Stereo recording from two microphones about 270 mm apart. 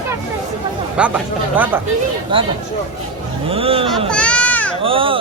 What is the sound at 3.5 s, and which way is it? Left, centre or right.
Speech, right.